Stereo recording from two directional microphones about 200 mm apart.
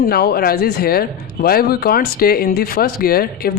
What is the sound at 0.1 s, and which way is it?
Speech, 50° left (ahead or behind).